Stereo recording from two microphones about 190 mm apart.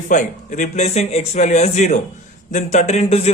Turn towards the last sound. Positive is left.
turn(degrees=35)  # may be behind; listen again after turning